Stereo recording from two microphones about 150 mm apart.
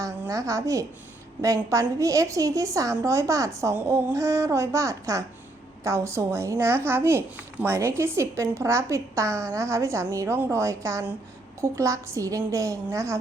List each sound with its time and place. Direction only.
0.0 s a woman's voice: 20° right (ahead or behind)